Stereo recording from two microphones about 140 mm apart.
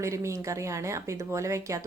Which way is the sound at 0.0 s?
20° right (ahead or behind).